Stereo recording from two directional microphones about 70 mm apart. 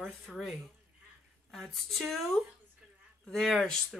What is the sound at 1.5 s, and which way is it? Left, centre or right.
Speech, centre.